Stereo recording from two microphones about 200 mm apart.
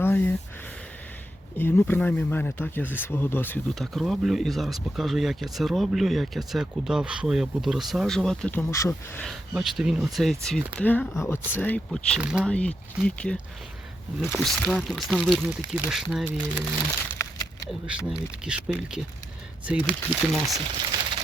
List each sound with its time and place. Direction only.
0.0 s speech: 10° left (ahead or behind)
1.5 s speech: 10° left (ahead or behind)
9.2 s speech: centre (ahead or behind)
12.5 s speech: 5° left (ahead or behind)
17.2 s a sound: 15° left (ahead or behind)
17.7 s speech: 5° right (ahead or behind)